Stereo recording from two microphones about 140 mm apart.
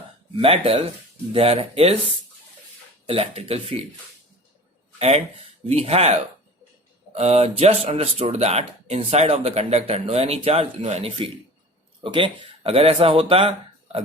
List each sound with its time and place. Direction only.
0.3 s speech: 40° right (ahead or behind)
3.1 s speech: 45° right (ahead or behind)
4.9 s speech: 50° right (ahead or behind)